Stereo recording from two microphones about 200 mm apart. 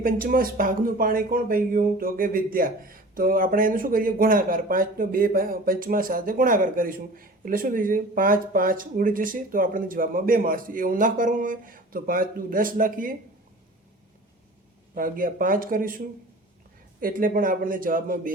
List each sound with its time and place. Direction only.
0.0 s speech: 45° right (ahead or behind)
14.9 s speech: 45° right (ahead or behind)
17.0 s speech: 45° right (ahead or behind)